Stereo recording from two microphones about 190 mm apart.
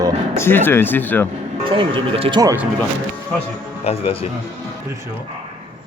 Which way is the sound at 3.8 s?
30° left (ahead or behind).